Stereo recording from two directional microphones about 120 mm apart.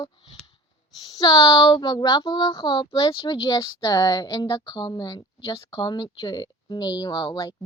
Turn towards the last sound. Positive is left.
turn(degrees=30)  # may be behind; listen again after turning